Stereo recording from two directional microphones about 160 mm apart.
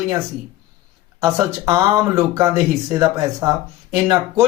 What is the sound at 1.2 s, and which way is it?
Speech, 20° right (ahead or behind).